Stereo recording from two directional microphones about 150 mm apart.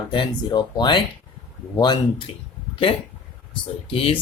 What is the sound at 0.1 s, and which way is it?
Speech, 30° left (ahead or behind).